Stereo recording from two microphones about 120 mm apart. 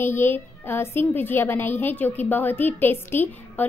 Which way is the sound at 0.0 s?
20° left (ahead or behind).